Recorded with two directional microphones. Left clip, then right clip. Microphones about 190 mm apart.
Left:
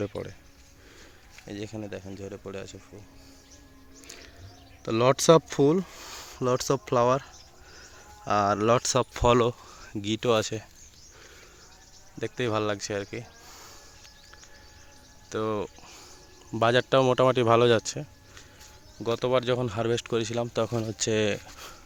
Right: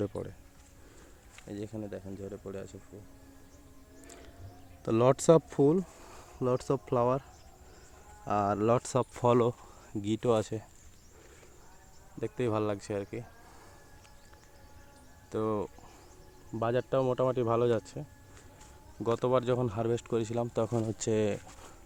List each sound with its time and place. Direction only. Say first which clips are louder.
0.0 s speech: left 3 dB; centre (ahead or behind)
1.4 s speech: left 3 dB; 5° left (ahead or behind)
4.0 s music: left 6 dB; 10° right (ahead or behind)
4.8 s speech: left 3 dB; 10° right (ahead or behind)
12.2 s speech: left 4 dB; 5° right (ahead or behind)
15.3 s speech: left 3 dB; 5° right (ahead or behind)
16.6 s speech: left 8 dB; 15° left (ahead or behind)
19.0 s speech: left 3 dB; 15° right (ahead or behind)